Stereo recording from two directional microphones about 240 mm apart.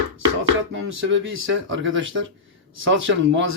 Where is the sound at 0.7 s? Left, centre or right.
Right.